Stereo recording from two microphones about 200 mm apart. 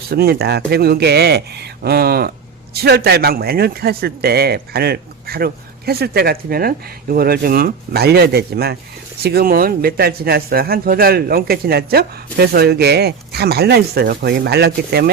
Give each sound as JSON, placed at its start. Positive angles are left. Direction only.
{"t": 0.1, "sound": "a man's voice", "side_deg": -50}